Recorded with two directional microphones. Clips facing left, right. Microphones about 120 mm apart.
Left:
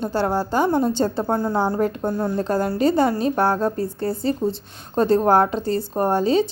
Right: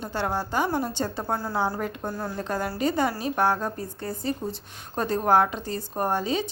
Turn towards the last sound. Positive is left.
turn(degrees=30)  # may be behind; listen again after turning